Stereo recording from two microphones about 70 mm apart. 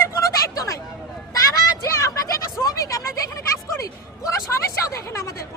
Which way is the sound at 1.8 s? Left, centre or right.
Left.